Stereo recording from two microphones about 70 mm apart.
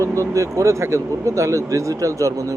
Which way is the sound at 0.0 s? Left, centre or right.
Right.